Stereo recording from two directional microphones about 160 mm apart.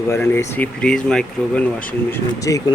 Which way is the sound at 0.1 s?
15° left (ahead or behind).